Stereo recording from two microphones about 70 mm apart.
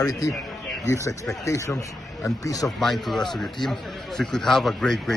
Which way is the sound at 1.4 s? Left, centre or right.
Left.